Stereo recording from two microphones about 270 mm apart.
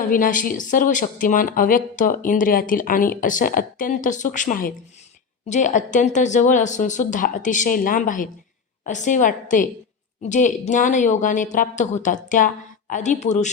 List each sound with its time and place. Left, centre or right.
0.1 s speech: left